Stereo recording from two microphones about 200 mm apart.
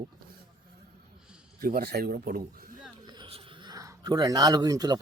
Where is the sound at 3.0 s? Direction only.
25° right (ahead or behind).